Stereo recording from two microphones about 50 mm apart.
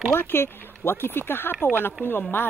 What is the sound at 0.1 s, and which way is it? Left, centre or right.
Speech, left.